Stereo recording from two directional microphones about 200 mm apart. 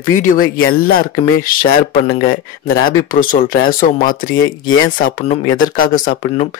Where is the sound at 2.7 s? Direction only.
45° left (ahead or behind).